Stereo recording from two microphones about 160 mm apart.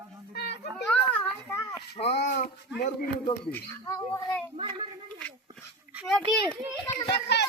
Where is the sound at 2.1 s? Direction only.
90° left.